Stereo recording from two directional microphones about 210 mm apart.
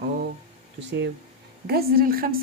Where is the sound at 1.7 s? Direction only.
45° right (ahead or behind).